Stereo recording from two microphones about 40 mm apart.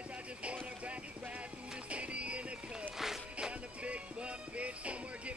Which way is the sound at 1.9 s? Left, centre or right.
Right.